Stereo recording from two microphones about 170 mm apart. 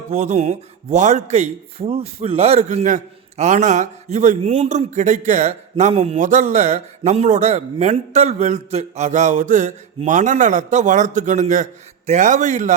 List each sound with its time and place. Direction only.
0.1 s speech: 45° right (ahead or behind)